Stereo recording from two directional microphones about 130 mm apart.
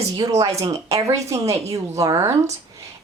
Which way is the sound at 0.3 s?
25° right (ahead or behind).